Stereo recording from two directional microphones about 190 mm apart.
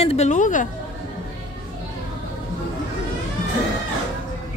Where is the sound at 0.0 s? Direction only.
35° left (ahead or behind).